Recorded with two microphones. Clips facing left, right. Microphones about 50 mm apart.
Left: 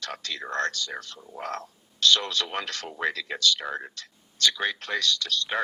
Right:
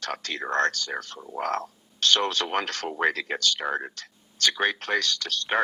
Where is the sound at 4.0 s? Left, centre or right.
Right.